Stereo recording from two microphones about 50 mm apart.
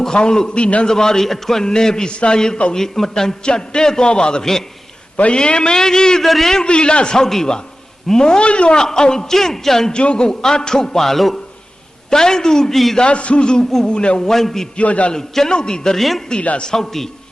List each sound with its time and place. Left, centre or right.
0.0 s a man's voice: centre
0.9 s a man's voice: centre
5.1 s a man's voice: left
6.2 s a man's voice: centre
6.5 s a man's voice: centre
9.9 s a man's voice: left; by 13.0 s centre
13.0 s a man's voice: left
14.3 s a man's voice: centre
14.8 s a man's voice: left
15.1 s a man's voice: centre
16.4 s a man's voice: left
16.6 s a man's voice: centre